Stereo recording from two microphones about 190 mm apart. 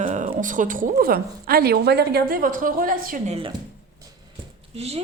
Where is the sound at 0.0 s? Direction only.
40° right (ahead or behind).